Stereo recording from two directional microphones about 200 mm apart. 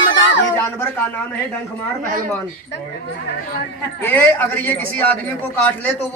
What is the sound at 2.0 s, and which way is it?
Speech, 45° right (ahead or behind).